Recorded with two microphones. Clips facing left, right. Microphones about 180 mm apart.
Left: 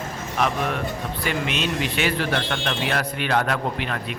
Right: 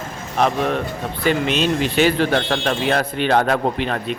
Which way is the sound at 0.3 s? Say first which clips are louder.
Right 5 dB; 35° right (ahead or behind).